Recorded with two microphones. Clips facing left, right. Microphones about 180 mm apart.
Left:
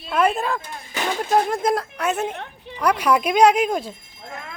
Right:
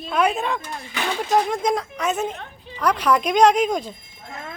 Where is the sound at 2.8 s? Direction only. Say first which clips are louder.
Left 1 dB; 10° left (ahead or behind).